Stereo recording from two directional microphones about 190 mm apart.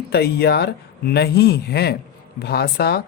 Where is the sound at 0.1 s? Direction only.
60° left (ahead or behind).